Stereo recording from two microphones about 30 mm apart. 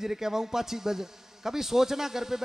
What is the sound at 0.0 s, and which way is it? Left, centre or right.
A man's voice, centre.